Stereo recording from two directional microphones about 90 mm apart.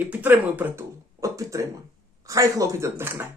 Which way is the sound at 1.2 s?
35° right (ahead or behind).